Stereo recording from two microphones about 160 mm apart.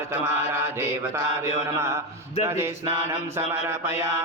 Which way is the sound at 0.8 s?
15° right (ahead or behind).